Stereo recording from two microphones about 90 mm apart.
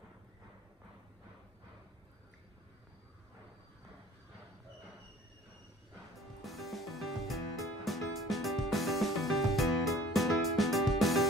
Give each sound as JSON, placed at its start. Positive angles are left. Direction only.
{"t": 6.4, "sound": "music", "side_deg": 0}